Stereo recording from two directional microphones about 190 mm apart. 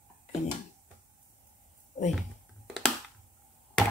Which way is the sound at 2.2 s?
Centre (ahead or behind).